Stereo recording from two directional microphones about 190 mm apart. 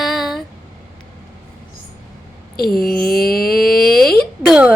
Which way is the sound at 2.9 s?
50° left (ahead or behind).